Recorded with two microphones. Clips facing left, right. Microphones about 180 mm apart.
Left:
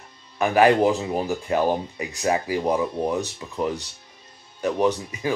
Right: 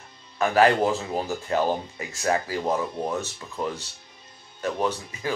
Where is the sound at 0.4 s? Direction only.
15° left (ahead or behind).